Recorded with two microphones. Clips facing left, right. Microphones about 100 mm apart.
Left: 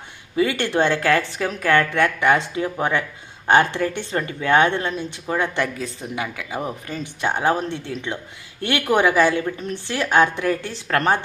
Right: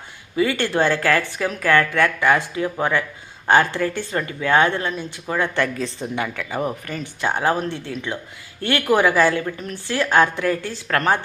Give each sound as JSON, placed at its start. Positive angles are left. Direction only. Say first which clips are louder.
{"t": 0.3, "sound": "a woman's voice", "louder": "even", "side_deg": 25}